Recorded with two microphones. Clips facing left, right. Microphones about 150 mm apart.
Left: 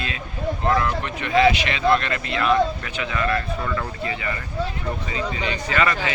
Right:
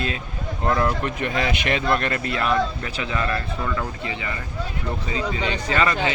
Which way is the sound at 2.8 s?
30° right (ahead or behind).